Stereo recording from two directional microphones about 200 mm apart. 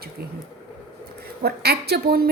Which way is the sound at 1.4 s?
50° right (ahead or behind).